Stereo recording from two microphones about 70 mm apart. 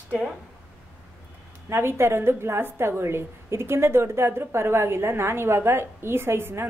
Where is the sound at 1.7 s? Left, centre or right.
Right.